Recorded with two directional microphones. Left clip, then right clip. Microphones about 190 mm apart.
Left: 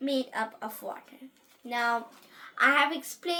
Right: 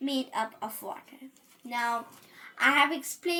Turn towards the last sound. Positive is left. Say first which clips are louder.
# right 1 dB
turn(degrees=15)  # may be behind; listen again after turning